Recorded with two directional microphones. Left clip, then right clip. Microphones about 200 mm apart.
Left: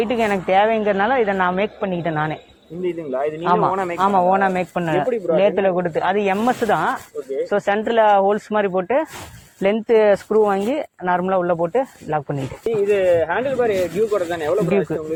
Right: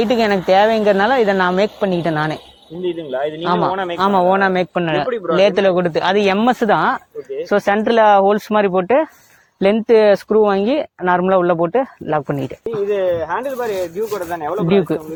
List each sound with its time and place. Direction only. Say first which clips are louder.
0.0 s speech: right 4 dB; 35° right (ahead or behind)
2.8 s speech: right 2 dB; centre (ahead or behind)
3.4 s speech: even; 35° right (ahead or behind)
12.9 s speech: left 1 dB; centre (ahead or behind)
14.7 s speech: right 4 dB; 35° right (ahead or behind)